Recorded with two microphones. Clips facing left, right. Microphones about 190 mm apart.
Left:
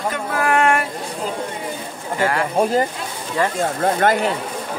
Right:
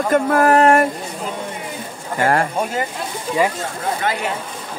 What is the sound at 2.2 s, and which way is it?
Speech, 45° right (ahead or behind).